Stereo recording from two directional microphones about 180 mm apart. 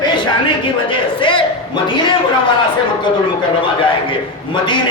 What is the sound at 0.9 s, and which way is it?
Speech, 30° left (ahead or behind).